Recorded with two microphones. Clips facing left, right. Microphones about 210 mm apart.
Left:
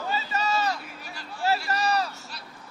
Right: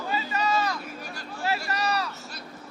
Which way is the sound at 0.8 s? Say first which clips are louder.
Right 4 dB; 45° right (ahead or behind).